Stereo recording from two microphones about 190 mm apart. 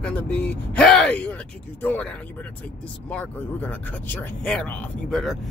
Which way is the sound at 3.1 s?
10° left (ahead or behind).